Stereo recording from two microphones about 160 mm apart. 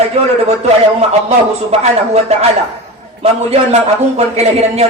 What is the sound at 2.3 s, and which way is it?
A man's voice, 40° right (ahead or behind).